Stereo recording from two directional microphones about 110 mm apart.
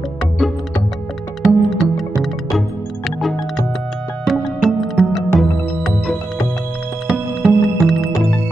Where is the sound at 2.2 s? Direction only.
Centre (ahead or behind).